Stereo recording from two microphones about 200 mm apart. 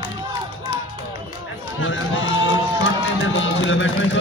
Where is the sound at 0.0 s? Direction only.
20° right (ahead or behind).